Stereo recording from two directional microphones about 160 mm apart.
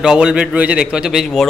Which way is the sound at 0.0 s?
5° right (ahead or behind).